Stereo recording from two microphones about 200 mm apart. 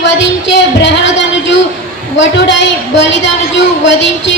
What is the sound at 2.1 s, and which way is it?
A woman's voice, 65° left (ahead or behind).